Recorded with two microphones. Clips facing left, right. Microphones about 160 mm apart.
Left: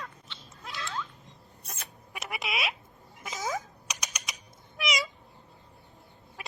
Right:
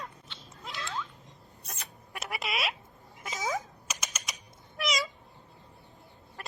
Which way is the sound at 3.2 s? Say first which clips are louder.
Even; centre (ahead or behind).